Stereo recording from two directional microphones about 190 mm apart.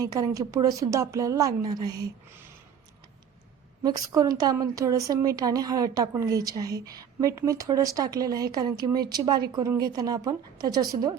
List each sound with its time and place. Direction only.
0.0 s a woman's voice: 20° right (ahead or behind)
3.8 s a woman's voice: 20° right (ahead or behind)